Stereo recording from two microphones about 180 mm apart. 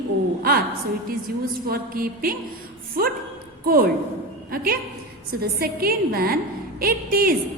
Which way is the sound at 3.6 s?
55° right (ahead or behind).